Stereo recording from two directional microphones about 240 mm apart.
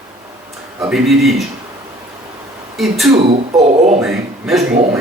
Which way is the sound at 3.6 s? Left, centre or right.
Right.